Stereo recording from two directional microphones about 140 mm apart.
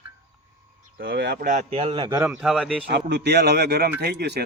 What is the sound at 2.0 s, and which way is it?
Speech, 25° right (ahead or behind).